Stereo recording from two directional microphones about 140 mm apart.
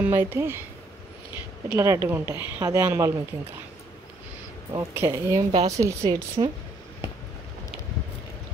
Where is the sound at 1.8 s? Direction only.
20° right (ahead or behind).